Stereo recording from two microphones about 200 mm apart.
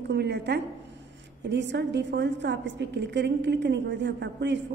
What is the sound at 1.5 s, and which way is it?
A woman's voice, 60° right (ahead or behind).